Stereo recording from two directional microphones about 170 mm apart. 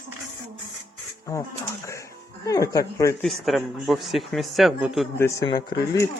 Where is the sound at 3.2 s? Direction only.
Centre (ahead or behind).